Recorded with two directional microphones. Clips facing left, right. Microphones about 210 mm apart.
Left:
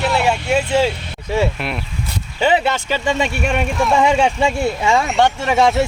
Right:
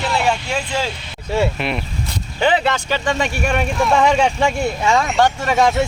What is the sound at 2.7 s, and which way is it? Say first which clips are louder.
Speech: left 1 dB; 25° left (ahead or behind).